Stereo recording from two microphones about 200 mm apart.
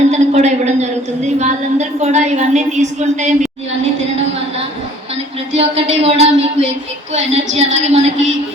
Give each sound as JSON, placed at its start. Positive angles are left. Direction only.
{"t": 0.1, "sound": "a woman's voice", "side_deg": -35}
{"t": 5.5, "sound": "a woman's voice", "side_deg": -30}